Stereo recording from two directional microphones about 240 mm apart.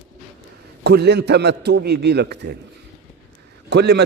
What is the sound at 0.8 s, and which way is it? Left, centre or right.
A man's voice, right.